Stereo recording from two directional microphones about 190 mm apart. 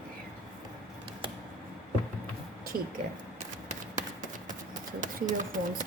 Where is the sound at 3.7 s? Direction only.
40° right (ahead or behind).